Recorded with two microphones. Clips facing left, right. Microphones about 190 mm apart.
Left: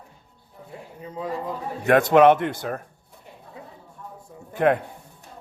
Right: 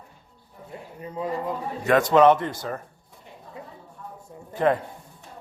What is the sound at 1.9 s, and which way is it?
Speech, 60° left (ahead or behind).